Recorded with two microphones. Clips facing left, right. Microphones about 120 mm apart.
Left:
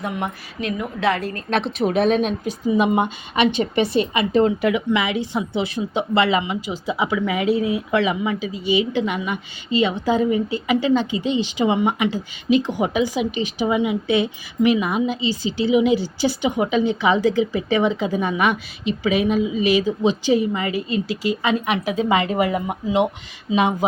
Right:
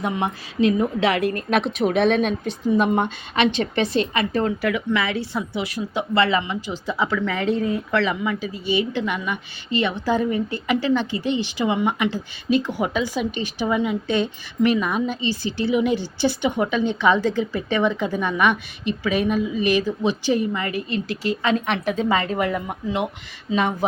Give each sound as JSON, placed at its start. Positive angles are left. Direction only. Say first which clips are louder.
{"t": 0.0, "sound": "a woman's voice", "louder": "right 2 dB", "side_deg": -25}
{"t": 1.5, "sound": "a woman's voice", "louder": "left 3 dB", "side_deg": -5}